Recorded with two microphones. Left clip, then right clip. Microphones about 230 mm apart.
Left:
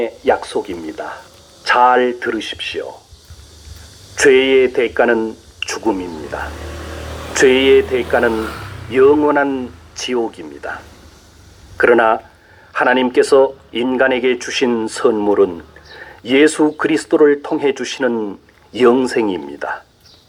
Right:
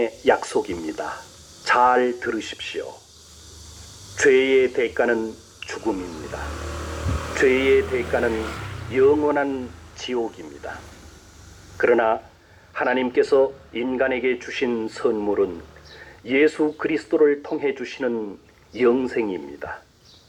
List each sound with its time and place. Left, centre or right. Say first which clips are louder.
0.0 s speech: left 4 dB; centre
1.6 s speech: left 6 dB; left
4.1 s speech: left 6 dB; left
6.7 s vehicle: left 2 dB; centre
7.3 s speech: left 7 dB; left
11.8 s speech: left 7 dB; left